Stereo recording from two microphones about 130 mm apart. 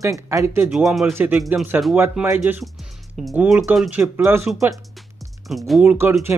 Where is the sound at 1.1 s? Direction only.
20° right (ahead or behind).